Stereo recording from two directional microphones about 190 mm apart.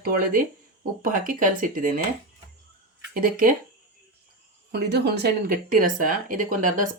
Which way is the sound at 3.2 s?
50° right (ahead or behind).